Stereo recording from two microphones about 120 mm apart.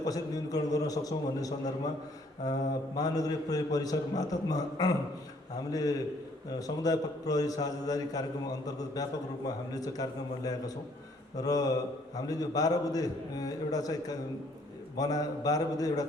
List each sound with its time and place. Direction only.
0.0 s a man's voice: 30° left (ahead or behind)